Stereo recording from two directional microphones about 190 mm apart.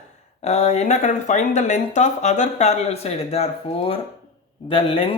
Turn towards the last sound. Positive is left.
turn(degrees=30)  # may be behind; listen again after turning